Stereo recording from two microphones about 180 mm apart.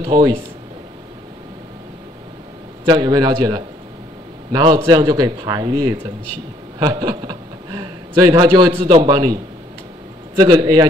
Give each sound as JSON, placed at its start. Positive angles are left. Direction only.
{"t": 0.0, "sound": "a man's voice", "side_deg": -20}
{"t": 2.8, "sound": "a man's voice", "side_deg": -25}